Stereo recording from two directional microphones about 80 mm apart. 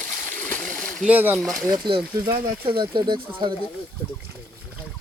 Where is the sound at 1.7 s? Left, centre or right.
Right.